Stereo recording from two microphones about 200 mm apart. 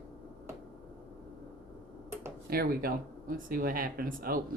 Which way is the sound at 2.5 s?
45° right (ahead or behind).